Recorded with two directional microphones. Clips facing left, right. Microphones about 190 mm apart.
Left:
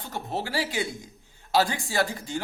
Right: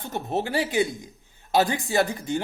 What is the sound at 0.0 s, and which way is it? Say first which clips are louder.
A man's voice: right 4 dB; 20° right (ahead or behind).